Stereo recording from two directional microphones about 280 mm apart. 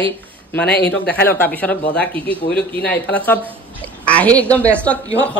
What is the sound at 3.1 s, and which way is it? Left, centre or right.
A man's voice, centre.